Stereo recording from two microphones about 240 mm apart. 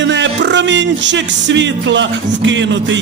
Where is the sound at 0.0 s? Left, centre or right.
Right.